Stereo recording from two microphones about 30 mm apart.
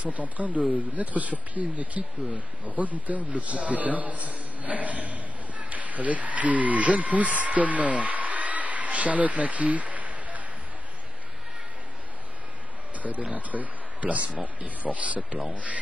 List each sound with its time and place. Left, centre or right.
0.0 s speech: right
13.0 s speech: right